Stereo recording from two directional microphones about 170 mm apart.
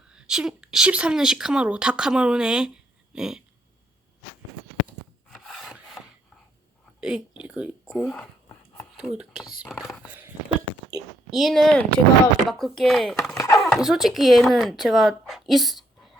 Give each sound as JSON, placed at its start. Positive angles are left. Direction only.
{"t": 0.1, "sound": "speech", "side_deg": -5}
{"t": 5.3, "sound": "wood", "side_deg": 0}
{"t": 7.0, "sound": "speech", "side_deg": -5}
{"t": 11.3, "sound": "speech", "side_deg": 0}
{"t": 13.3, "sound": "a sound", "side_deg": 20}
{"t": 13.7, "sound": "speech", "side_deg": 0}